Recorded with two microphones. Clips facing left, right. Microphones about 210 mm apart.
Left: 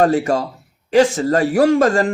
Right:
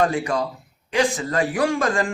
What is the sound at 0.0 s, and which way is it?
A man's voice, 45° left (ahead or behind).